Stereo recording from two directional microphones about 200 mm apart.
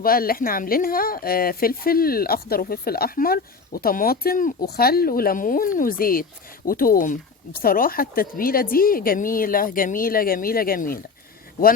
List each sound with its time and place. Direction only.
0.0 s speech: 45° left (ahead or behind)